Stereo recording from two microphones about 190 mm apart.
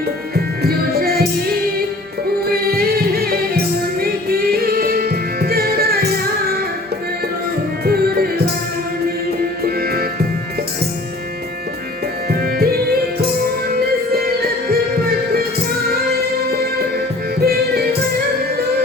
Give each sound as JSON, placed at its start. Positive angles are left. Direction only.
{"t": 0.3, "sound": "music", "side_deg": -55}
{"t": 7.9, "sound": "music", "side_deg": -55}
{"t": 9.6, "sound": "music", "side_deg": -55}
{"t": 12.3, "sound": "music", "side_deg": -55}
{"t": 16.5, "sound": "music", "side_deg": -55}